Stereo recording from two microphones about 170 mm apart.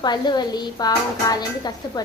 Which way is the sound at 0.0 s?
25° left (ahead or behind).